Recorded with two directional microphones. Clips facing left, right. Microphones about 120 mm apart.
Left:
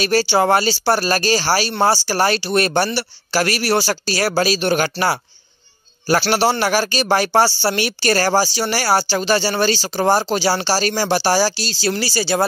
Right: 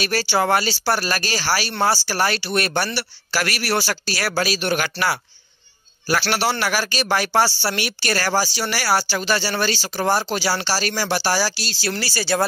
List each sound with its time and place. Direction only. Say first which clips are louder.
0.0 s speech: left 5 dB; 30° left (ahead or behind)
6.6 s speech: left 5 dB; 35° left (ahead or behind)